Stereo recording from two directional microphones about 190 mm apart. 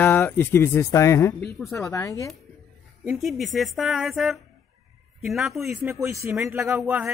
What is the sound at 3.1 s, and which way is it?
Speech, centre (ahead or behind).